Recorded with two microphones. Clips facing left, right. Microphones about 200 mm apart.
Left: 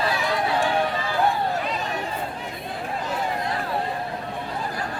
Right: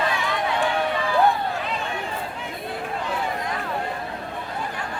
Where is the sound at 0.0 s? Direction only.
35° left (ahead or behind).